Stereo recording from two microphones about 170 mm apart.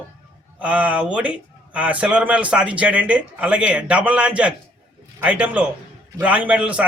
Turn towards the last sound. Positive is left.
turn(degrees=-5)  # may be behind; listen again after turning